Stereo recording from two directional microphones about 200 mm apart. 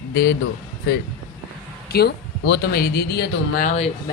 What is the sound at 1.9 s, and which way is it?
Speech, 50° left (ahead or behind).